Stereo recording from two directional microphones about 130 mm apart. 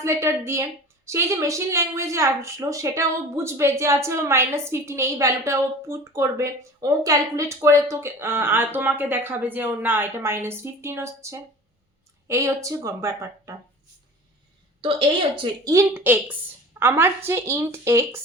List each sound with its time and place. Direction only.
0.0 s a woman's voice: 20° right (ahead or behind)
14.8 s a woman's voice: 45° right (ahead or behind)
15.6 s a woman's voice: 25° right (ahead or behind)